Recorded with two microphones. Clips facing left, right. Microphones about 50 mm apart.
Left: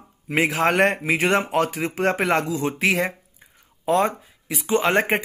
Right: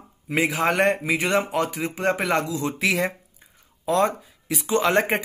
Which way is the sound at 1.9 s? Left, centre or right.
Left.